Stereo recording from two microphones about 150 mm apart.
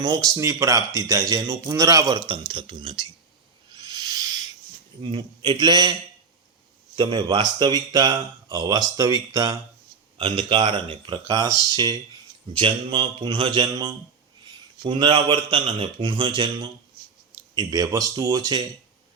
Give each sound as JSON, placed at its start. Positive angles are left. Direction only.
{"t": 0.0, "sound": "a man's voice", "side_deg": -25}
{"t": 3.8, "sound": "owl", "side_deg": -25}
{"t": 5.0, "sound": "speech", "side_deg": -35}
{"t": 10.2, "sound": "a man's voice", "side_deg": -35}